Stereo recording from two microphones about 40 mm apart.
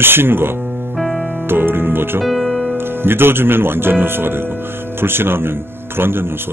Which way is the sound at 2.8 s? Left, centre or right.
Right.